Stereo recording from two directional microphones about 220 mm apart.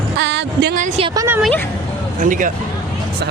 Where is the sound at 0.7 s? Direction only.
30° right (ahead or behind).